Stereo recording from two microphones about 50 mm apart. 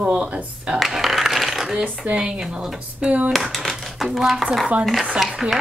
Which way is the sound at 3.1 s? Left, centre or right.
Right.